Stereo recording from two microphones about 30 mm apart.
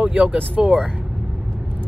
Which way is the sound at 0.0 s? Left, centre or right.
Right.